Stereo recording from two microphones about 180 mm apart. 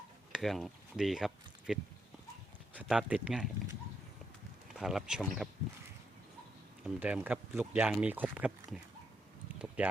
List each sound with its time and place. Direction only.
0.3 s speech: centre (ahead or behind)
2.8 s speech: 5° right (ahead or behind)
4.7 s speech: centre (ahead or behind)
6.8 s speech: 5° right (ahead or behind)
9.6 s a sound: 5° right (ahead or behind)